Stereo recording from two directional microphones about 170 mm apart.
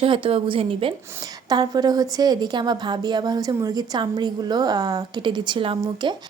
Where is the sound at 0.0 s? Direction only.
35° right (ahead or behind).